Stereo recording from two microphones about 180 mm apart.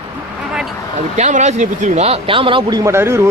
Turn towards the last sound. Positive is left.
turn(degrees=-15)  # may be behind; listen again after turning